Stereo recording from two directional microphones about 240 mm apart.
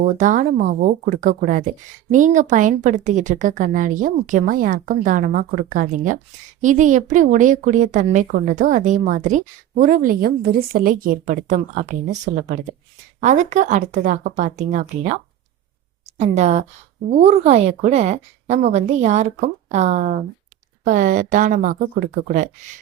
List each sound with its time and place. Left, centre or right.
0.0 s a woman's voice: right